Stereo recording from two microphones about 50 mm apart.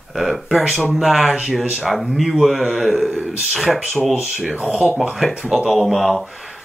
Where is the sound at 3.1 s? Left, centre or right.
Right.